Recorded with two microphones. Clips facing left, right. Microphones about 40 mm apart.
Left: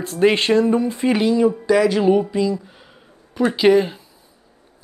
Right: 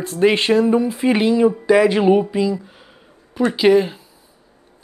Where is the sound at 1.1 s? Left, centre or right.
Centre.